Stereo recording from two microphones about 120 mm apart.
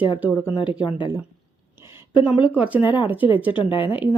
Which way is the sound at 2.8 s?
40° left (ahead or behind).